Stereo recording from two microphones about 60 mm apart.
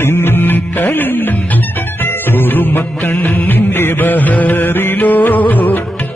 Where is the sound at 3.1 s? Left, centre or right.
Left.